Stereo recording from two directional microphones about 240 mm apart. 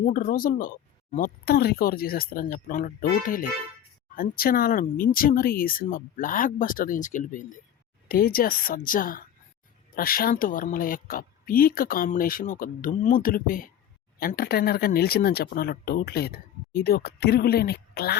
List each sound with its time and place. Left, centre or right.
0.0 s speech: left